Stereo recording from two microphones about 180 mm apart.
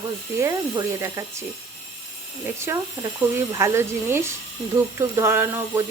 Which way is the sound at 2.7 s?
15° right (ahead or behind).